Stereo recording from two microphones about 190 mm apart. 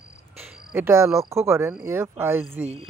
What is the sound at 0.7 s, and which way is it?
Speech, 10° right (ahead or behind).